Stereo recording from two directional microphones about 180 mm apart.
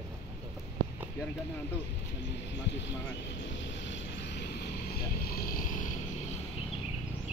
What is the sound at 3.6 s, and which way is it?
Vehicle, 90° left.